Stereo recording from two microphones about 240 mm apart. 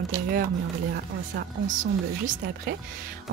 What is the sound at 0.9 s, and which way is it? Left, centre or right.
Speech, right.